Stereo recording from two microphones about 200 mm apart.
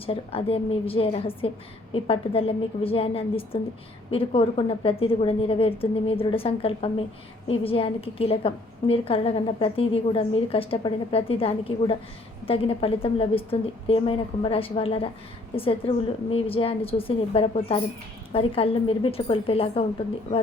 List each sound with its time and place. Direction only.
0.0 s a woman's voice: 30° left (ahead or behind)